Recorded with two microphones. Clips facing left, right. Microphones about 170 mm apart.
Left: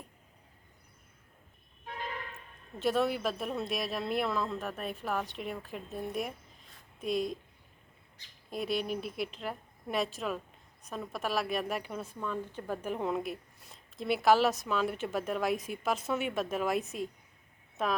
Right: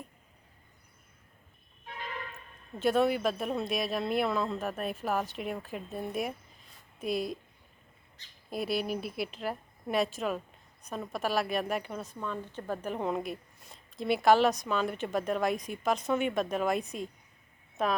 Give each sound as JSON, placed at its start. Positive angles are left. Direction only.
{"t": 2.7, "sound": "a woman's voice", "side_deg": 0}
{"t": 8.4, "sound": "a woman's voice", "side_deg": -5}